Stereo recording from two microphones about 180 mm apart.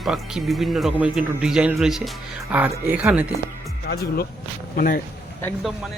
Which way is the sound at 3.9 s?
60° left (ahead or behind).